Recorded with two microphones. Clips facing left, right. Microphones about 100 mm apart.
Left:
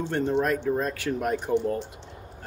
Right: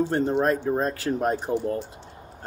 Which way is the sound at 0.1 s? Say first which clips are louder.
Right 2 dB; 35° right (ahead or behind).